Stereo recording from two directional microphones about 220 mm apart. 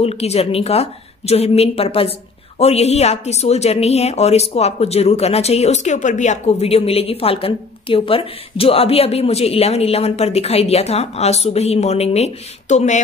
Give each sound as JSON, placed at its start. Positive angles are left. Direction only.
{"t": 0.0, "sound": "a woman's voice", "side_deg": 30}